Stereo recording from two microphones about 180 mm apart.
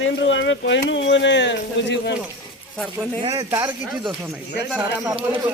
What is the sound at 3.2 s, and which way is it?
Speech, 25° right (ahead or behind).